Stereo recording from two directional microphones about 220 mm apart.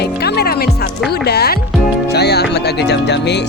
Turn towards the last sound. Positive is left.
turn(degrees=50)  # may be behind; listen again after turning